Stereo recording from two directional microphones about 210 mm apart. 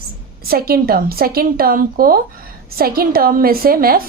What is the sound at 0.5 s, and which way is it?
A woman's voice, 45° right (ahead or behind).